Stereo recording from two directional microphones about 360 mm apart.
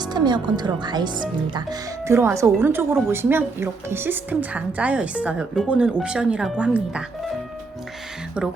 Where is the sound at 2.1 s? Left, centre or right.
Centre.